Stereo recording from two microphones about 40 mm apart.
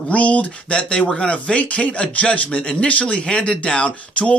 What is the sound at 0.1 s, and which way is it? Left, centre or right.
Speech, left.